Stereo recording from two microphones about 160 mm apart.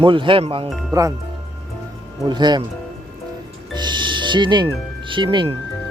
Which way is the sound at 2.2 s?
25° right (ahead or behind).